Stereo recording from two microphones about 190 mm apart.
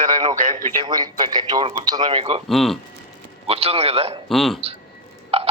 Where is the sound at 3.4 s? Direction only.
30° right (ahead or behind).